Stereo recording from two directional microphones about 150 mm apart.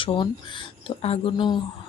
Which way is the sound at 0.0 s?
35° left (ahead or behind).